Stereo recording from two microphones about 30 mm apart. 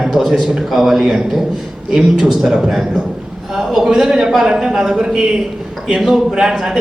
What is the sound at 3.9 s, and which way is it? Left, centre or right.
A man's voice, centre.